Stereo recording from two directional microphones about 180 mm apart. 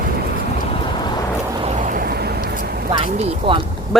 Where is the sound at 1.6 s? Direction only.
50° right (ahead or behind).